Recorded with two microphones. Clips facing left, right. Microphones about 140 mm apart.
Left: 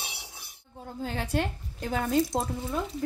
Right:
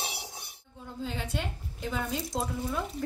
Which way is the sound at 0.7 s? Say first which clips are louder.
Left 3 dB; 50° left (ahead or behind).